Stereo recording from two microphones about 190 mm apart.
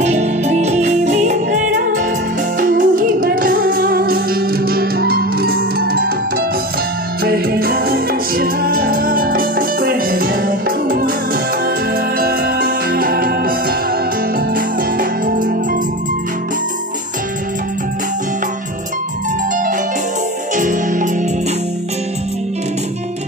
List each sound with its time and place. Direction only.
0.0 s music: 35° right (ahead or behind)
2.6 s music: 45° right (ahead or behind)
7.2 s music: 50° right (ahead or behind)
12.2 s music: 55° right (ahead or behind)
15.0 s music: 45° right (ahead or behind)
20.5 s music: 40° right (ahead or behind)